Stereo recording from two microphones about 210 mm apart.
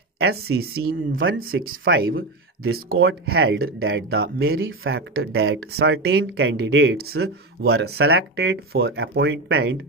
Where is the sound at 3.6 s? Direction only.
75° right (ahead or behind).